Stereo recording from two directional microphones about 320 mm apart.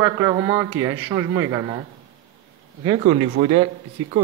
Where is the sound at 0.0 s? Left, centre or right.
Centre.